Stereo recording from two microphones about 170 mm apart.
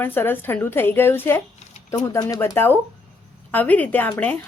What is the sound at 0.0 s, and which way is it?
A woman's voice, 10° left (ahead or behind).